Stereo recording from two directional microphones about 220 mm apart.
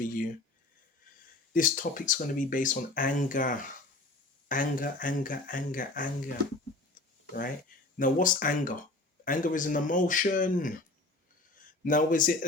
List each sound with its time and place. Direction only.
0.0 s speech: 40° left (ahead or behind)
1.5 s speech: 40° left (ahead or behind)
7.9 s speech: 35° left (ahead or behind)